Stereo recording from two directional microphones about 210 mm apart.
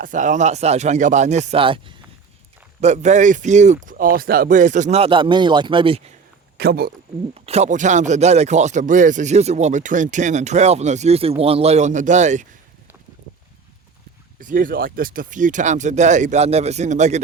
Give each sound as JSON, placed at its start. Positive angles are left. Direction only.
{"t": 0.0, "sound": "speech", "side_deg": -35}
{"t": 2.8, "sound": "speech", "side_deg": -35}
{"t": 6.6, "sound": "speech", "side_deg": -50}
{"t": 7.3, "sound": "speech", "side_deg": -30}
{"t": 14.3, "sound": "speech", "side_deg": -40}